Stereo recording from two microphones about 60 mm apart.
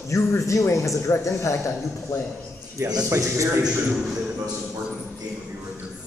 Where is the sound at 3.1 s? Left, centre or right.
Right.